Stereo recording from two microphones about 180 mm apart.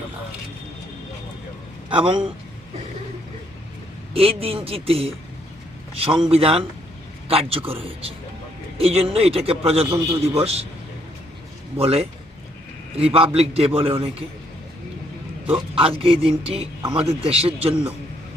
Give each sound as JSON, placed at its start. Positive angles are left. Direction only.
{"t": 1.9, "sound": "speech", "side_deg": -25}
{"t": 4.1, "sound": "a man's voice", "side_deg": -30}
{"t": 9.8, "sound": "a man's voice", "side_deg": -15}
{"t": 10.2, "sound": "a man's voice", "side_deg": -35}
{"t": 11.8, "sound": "a man's voice", "side_deg": -35}
{"t": 15.4, "sound": "a man's voice", "side_deg": -30}